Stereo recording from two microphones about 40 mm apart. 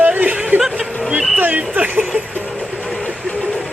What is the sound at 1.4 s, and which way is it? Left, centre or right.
Speech, right.